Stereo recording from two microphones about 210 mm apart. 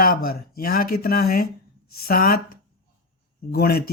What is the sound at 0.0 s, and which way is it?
Speech, 45° left (ahead or behind).